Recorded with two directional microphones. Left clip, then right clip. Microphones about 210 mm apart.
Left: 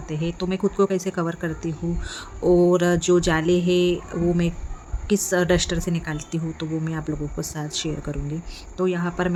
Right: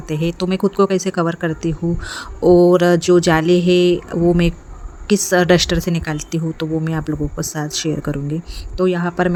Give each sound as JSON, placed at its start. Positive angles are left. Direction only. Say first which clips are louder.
{"t": 0.1, "sound": "speech", "louder": "right 7 dB", "side_deg": -35}